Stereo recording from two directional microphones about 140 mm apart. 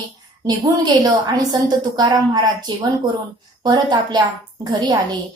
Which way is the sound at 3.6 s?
30° right (ahead or behind).